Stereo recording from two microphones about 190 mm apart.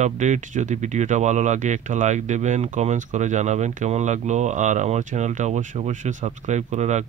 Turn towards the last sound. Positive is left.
turn(degrees=-40)  # may be behind; listen again after turning